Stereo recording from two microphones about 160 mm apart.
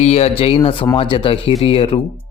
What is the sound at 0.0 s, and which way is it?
Speech, 40° left (ahead or behind).